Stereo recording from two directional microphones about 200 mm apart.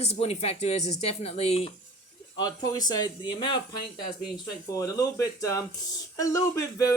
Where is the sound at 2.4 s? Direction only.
20° left (ahead or behind).